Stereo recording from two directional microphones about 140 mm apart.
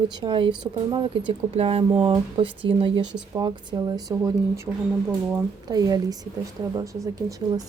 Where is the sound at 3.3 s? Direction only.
25° right (ahead or behind).